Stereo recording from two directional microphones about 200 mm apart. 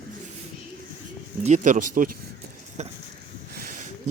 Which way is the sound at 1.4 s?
40° right (ahead or behind).